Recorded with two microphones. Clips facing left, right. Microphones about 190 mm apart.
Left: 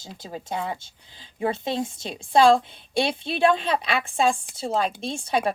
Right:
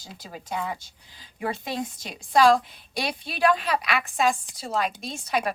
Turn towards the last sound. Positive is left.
turn(degrees=30)  # may be behind; listen again after turning